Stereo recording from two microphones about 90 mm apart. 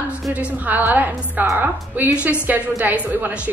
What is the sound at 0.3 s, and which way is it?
A woman's voice, 15° right (ahead or behind).